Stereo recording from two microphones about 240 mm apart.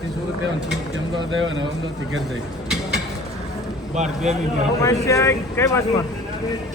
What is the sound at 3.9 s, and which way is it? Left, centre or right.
Speech, right.